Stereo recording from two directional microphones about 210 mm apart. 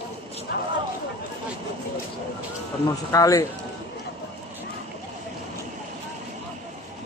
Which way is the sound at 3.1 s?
15° left (ahead or behind).